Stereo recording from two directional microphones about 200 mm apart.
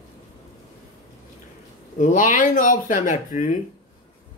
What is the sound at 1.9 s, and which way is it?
Speech, 40° left (ahead or behind).